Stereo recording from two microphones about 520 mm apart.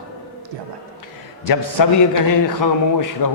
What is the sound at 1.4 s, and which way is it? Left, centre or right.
A man's voice, left.